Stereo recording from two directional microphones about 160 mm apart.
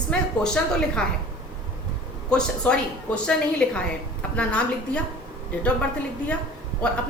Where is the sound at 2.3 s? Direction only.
5° left (ahead or behind).